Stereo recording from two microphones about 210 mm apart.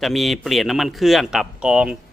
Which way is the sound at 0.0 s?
Centre (ahead or behind).